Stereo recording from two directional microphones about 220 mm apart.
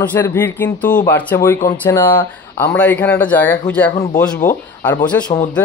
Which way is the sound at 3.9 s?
30° left (ahead or behind).